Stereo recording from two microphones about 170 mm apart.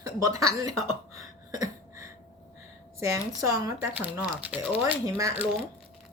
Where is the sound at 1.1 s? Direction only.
20° right (ahead or behind).